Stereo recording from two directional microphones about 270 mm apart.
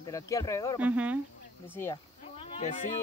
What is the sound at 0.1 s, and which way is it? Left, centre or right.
Speech, centre.